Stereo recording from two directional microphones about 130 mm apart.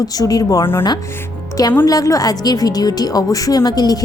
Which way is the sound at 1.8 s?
25° left (ahead or behind).